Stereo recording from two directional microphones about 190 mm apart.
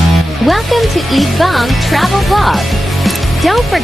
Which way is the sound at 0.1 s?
Centre (ahead or behind).